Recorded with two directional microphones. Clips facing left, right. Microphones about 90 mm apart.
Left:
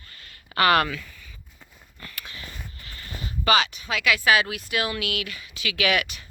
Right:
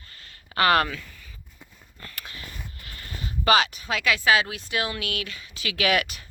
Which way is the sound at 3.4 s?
45° right (ahead or behind).